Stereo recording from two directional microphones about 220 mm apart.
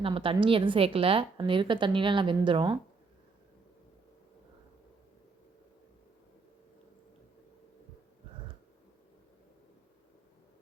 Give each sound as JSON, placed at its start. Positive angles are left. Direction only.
{"t": 0.0, "sound": "a woman's voice", "side_deg": -25}